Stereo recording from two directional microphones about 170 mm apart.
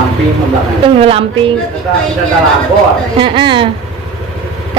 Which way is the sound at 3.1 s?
30° right (ahead or behind).